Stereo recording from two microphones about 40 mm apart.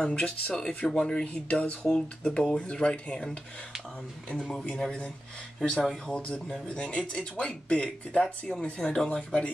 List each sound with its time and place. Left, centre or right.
0.0 s speech: left
1.2 s speech: left
5.7 s speech: left
8.1 s speech: centre